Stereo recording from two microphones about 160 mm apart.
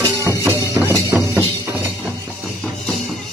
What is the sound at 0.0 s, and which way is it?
Music, 20° right (ahead or behind).